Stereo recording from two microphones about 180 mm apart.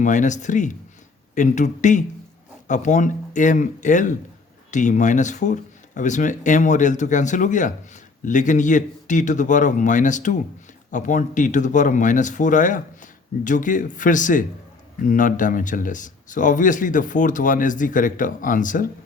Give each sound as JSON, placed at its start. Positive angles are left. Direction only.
{"t": 0.0, "sound": "a man's voice", "side_deg": 45}